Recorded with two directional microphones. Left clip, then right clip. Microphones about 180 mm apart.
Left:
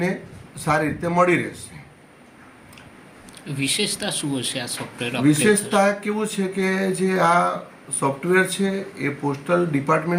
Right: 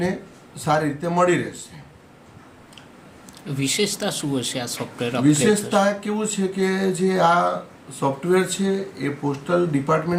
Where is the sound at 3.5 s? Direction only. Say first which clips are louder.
Right 1 dB; 50° right (ahead or behind).